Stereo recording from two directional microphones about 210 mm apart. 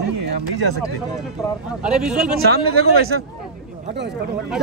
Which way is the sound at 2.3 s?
45° right (ahead or behind).